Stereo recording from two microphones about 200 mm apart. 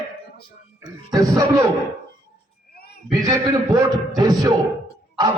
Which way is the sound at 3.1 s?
20° right (ahead or behind).